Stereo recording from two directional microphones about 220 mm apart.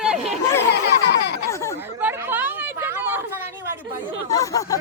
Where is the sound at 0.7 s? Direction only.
50° left (ahead or behind).